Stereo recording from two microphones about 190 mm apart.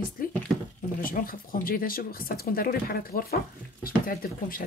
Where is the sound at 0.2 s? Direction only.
50° left (ahead or behind).